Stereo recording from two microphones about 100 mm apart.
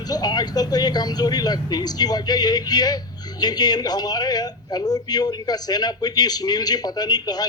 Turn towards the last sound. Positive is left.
turn(degrees=40)  # may be behind; listen again after turning